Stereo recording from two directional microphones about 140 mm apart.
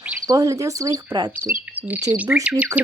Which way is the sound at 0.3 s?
25° right (ahead or behind).